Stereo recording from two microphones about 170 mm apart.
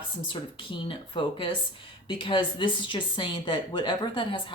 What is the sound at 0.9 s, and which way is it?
A woman's voice, 30° left (ahead or behind).